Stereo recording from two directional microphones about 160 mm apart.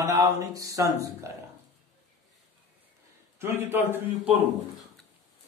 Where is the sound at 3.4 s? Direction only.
15° right (ahead or behind).